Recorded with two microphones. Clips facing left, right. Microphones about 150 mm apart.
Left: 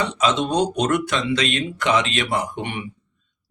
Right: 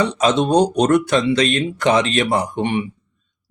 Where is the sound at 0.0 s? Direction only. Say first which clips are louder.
Right 4 dB; 40° right (ahead or behind).